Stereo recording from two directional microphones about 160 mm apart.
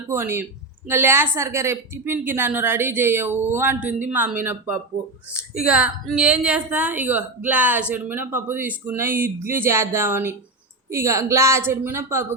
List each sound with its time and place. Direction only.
0.1 s a woman's voice: 15° right (ahead or behind)